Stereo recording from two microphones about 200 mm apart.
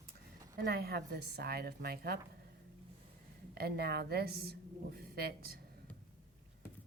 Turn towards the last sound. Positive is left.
turn(degrees=-50)  # may be behind; listen again after turning